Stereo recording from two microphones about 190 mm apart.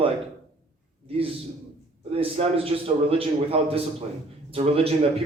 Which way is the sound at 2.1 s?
30° right (ahead or behind).